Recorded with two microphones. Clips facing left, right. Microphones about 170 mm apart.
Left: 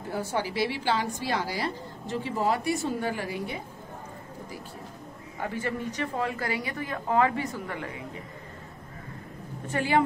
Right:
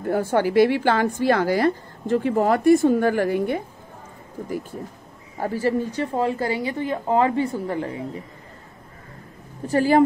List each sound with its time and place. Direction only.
0.0 s a woman's voice: 55° right (ahead or behind)
5.4 s a woman's voice: 35° right (ahead or behind)
9.7 s a woman's voice: 40° right (ahead or behind)